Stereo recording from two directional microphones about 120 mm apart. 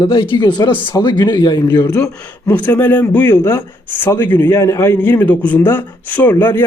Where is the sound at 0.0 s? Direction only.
45° left (ahead or behind).